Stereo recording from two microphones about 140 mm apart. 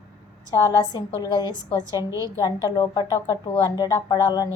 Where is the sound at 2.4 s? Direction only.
25° left (ahead or behind).